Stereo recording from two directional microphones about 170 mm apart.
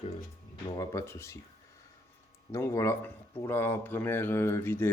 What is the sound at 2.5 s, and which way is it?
Speech, 15° left (ahead or behind).